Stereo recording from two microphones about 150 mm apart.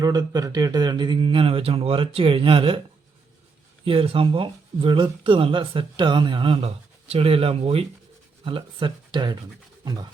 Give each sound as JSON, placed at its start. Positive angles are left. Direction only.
{"t": 0.0, "sound": "speech", "side_deg": -25}
{"t": 3.8, "sound": "speech", "side_deg": -35}
{"t": 9.8, "sound": "rub", "side_deg": -25}